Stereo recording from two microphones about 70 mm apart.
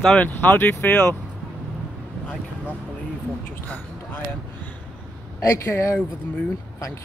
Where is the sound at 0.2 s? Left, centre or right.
Left.